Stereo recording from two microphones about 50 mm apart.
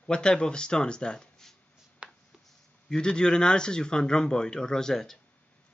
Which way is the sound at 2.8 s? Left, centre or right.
Centre.